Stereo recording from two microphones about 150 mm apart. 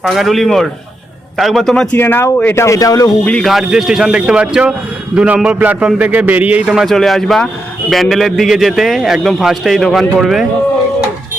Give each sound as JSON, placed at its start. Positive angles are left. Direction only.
{"t": 0.0, "sound": "a man's voice", "side_deg": 0}
{"t": 1.9, "sound": "speech", "side_deg": 15}
{"t": 3.2, "sound": "a man's voice", "side_deg": 5}